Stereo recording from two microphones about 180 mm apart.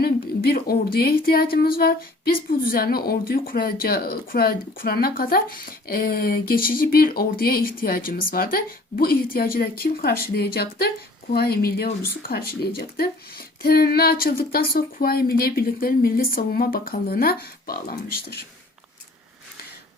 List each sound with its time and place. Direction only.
0.0 s speech: 60° left (ahead or behind)